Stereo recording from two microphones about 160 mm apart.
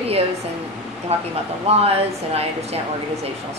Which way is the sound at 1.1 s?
40° right (ahead or behind).